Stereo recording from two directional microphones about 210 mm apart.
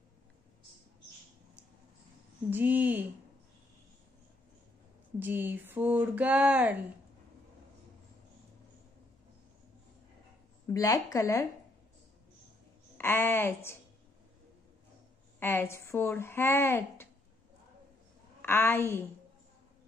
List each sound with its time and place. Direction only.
2.5 s speech: 10° right (ahead or behind)
5.2 s speech: 10° right (ahead or behind)
10.7 s speech: 15° left (ahead or behind)
12.9 s speech: 10° left (ahead or behind)
15.3 s speech: 10° left (ahead or behind)
18.4 s a woman's voice: 10° left (ahead or behind)